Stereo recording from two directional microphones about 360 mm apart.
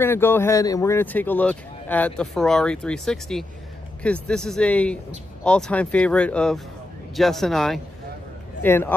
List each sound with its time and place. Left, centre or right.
0.0 s a man's voice: centre